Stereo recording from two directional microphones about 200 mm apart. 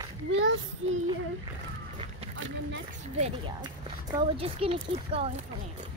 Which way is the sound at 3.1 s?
30° right (ahead or behind).